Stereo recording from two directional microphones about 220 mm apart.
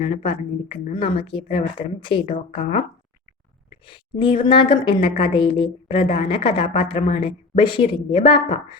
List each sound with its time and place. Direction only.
0.0 s a woman's voice: 25° left (ahead or behind)
3.8 s a woman's voice: 25° left (ahead or behind)